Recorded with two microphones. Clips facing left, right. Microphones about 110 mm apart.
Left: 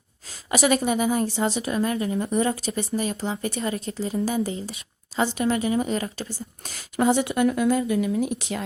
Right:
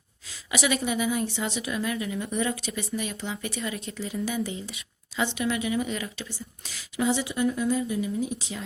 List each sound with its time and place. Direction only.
0.5 s speech: 45° left (ahead or behind); by 8.6 s 65° left (ahead or behind)